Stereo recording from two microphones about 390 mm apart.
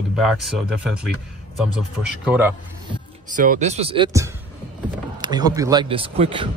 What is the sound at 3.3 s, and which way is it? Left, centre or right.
A man's voice, right.